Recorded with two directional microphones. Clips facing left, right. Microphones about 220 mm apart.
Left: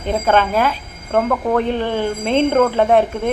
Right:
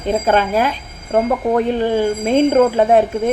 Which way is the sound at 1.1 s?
15° right (ahead or behind).